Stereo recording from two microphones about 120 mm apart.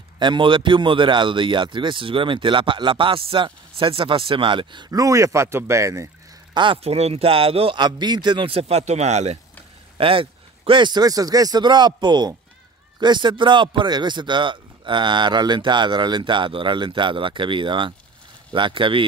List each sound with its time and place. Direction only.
0.2 s speech: 40° right (ahead or behind)
4.9 s speech: 25° right (ahead or behind)
6.5 s speech: 40° right (ahead or behind)
6.8 s speech: 60° right (ahead or behind)
9.9 s speech: 50° right (ahead or behind)